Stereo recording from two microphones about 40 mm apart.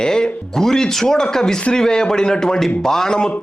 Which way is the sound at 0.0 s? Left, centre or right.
Centre.